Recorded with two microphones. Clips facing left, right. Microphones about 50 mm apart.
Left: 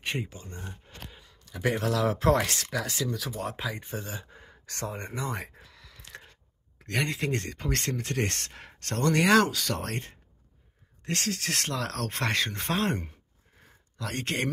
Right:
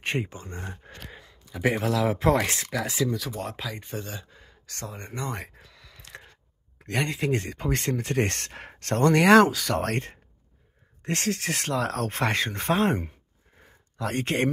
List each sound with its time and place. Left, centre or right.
0.2 s speech: right
1.4 s speech: centre
3.5 s speech: centre
4.3 s speech: left
5.1 s a sound: centre
6.8 s speech: centre
8.0 s speech: right
11.1 s speech: right
11.5 s speech: centre
13.9 s speech: right